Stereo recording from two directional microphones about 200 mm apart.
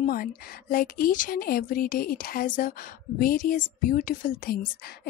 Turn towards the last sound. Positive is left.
turn(degrees=50)  # may be behind; listen again after turning